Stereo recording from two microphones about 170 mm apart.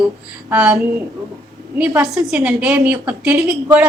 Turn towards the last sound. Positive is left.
turn(degrees=-10)  # may be behind; listen again after turning